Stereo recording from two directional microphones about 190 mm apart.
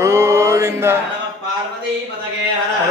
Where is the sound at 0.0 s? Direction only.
15° right (ahead or behind).